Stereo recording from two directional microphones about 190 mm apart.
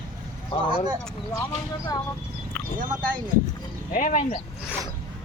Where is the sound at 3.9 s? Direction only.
45° left (ahead or behind).